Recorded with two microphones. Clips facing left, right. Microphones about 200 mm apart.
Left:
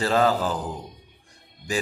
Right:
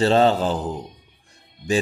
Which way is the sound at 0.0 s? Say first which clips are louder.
Right 4 dB; 25° right (ahead or behind).